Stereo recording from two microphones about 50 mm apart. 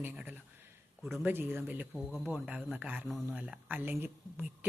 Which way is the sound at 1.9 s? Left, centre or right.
Centre.